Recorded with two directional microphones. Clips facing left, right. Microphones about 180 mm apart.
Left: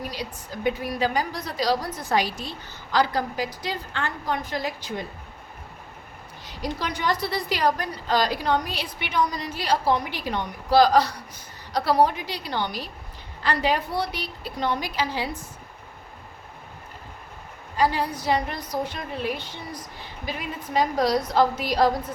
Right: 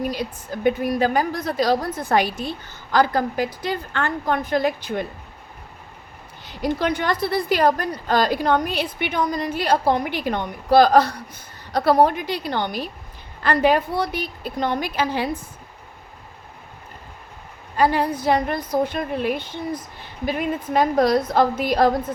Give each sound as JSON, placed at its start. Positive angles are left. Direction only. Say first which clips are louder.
{"t": 0.1, "sound": "a woman's voice", "louder": "right 6 dB", "side_deg": -50}
{"t": 6.4, "sound": "a woman's voice", "louder": "right 7 dB", "side_deg": -55}
{"t": 17.7, "sound": "a woman's voice", "louder": "right 4 dB", "side_deg": -55}